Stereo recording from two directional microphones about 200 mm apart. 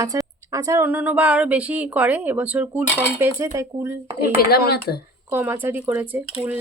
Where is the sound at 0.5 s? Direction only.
15° right (ahead or behind).